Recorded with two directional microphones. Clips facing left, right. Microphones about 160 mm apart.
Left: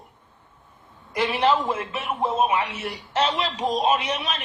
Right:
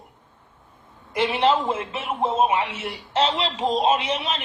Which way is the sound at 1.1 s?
25° right (ahead or behind).